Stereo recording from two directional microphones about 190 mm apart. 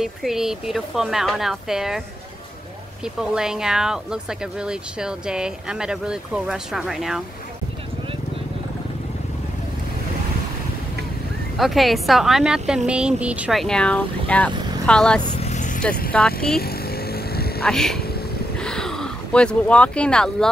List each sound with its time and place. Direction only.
0.0 s speech: centre (ahead or behind)
3.2 s speech: 5° right (ahead or behind)
11.5 s speech: centre (ahead or behind)
15.4 s vehicle: 40° left (ahead or behind)
16.1 s speech: 5° left (ahead or behind)
16.5 s vehicle: 55° left (ahead or behind)
17.6 s speech: 5° left (ahead or behind)